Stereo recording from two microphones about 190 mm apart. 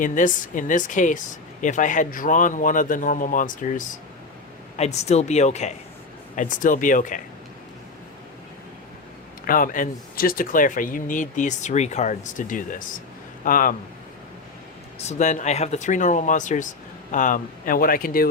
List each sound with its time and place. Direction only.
0.0 s speech: 45° left (ahead or behind)
9.5 s speech: 45° left (ahead or behind)
14.9 s speech: 35° left (ahead or behind)